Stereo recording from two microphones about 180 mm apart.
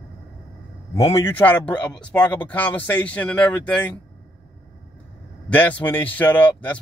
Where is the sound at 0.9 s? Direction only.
15° left (ahead or behind).